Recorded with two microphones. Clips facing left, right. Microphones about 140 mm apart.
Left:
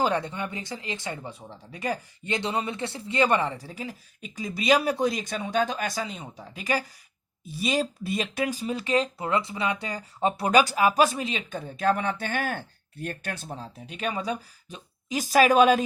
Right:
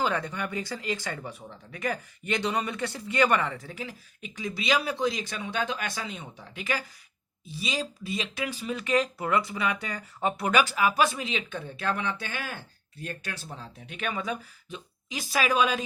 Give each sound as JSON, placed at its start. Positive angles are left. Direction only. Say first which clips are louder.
{"t": 0.0, "sound": "speech", "louder": "left 3 dB", "side_deg": 30}
{"t": 13.6, "sound": "speech", "louder": "left 3 dB", "side_deg": 35}